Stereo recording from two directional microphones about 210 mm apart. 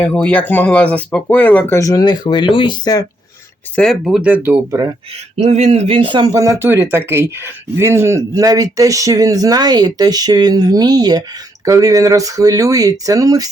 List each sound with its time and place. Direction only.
0.0 s speech: 5° left (ahead or behind)
3.8 s speech: centre (ahead or behind); by 4.9 s 15° right (ahead or behind)
5.4 s speech: 30° right (ahead or behind)